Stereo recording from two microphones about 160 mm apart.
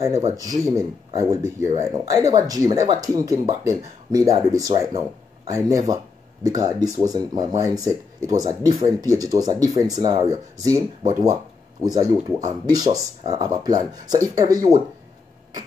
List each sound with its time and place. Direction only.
0.4 s speech: 20° right (ahead or behind)
11.8 s speech: 25° right (ahead or behind)